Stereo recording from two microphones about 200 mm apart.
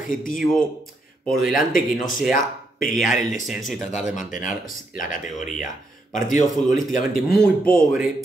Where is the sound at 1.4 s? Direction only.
45° left (ahead or behind).